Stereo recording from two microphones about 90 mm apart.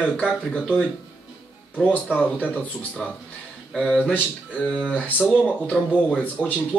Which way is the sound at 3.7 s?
10° left (ahead or behind).